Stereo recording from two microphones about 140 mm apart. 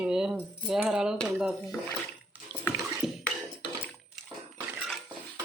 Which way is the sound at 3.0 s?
5° right (ahead or behind).